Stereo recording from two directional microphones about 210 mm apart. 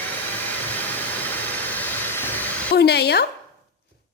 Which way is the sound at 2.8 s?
50° left (ahead or behind).